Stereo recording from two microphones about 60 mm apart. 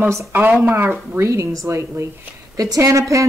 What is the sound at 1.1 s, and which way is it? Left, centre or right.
Speech, right.